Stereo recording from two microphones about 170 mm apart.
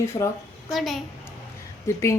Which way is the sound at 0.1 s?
25° left (ahead or behind).